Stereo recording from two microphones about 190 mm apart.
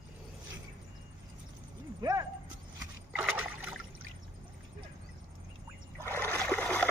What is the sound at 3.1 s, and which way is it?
Rowboat, 10° right (ahead or behind).